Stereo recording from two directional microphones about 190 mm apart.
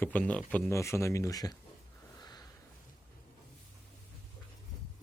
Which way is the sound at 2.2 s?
20° left (ahead or behind).